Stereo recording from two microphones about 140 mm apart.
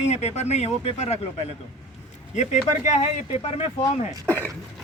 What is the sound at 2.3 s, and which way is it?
Speech, 55° left (ahead or behind).